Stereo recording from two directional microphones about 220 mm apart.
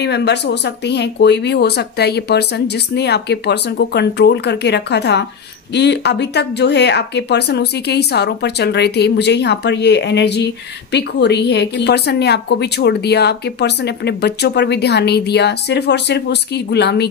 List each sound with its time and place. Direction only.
0.0 s speech: 50° left (ahead or behind)